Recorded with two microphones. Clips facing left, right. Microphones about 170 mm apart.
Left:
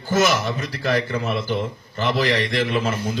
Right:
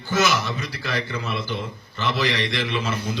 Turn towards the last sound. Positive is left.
turn(degrees=50)  # may be behind; listen again after turning